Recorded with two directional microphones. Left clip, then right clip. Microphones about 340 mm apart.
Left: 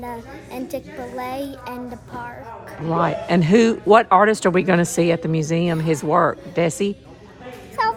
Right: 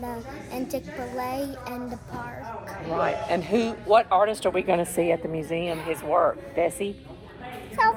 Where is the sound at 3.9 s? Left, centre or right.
Left.